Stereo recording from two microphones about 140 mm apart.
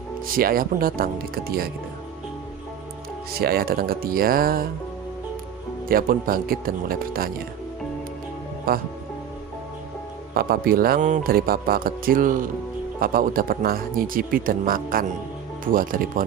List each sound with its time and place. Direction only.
0.3 s speech: 90° right
3.3 s speech: 90° right
5.9 s speech: 90° right
8.7 s speech: 90° right
10.3 s speech: 90° right
13.0 s speech: 90° right
15.6 s speech: 80° right